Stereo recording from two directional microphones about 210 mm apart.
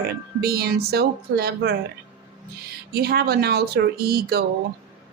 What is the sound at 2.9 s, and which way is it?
A woman's voice, 45° right (ahead or behind).